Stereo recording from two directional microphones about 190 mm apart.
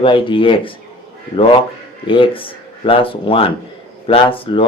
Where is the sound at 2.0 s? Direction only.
25° left (ahead or behind).